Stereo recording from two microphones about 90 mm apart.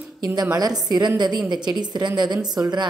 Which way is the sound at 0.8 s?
50° right (ahead or behind).